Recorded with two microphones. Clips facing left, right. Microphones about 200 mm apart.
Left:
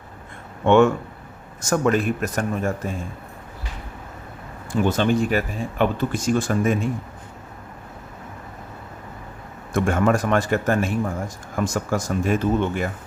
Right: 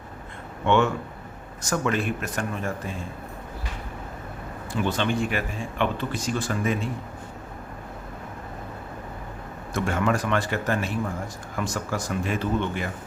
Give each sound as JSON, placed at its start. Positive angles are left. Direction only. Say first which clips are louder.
{"t": 0.6, "sound": "speech", "louder": "left 6 dB", "side_deg": 45}
{"t": 4.7, "sound": "speech", "louder": "left 6 dB", "side_deg": 45}
{"t": 9.7, "sound": "speech", "louder": "left 5 dB", "side_deg": 50}